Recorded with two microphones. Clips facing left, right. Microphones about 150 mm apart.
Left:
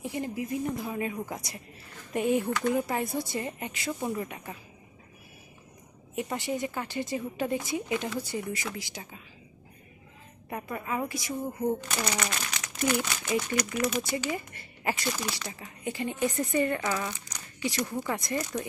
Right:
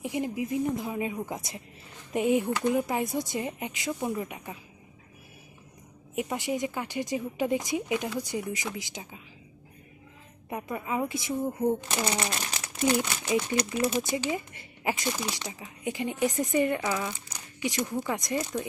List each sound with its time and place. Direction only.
0.0 s speech: 15° right (ahead or behind)
6.1 s speech: 15° right (ahead or behind)
10.5 s speech: 15° right (ahead or behind)
15.4 s speech: 5° right (ahead or behind)
15.8 s speech: 15° right (ahead or behind)